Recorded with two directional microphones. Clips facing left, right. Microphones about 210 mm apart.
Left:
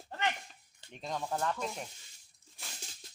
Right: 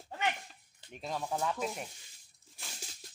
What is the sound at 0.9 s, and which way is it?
Speech, 5° right (ahead or behind).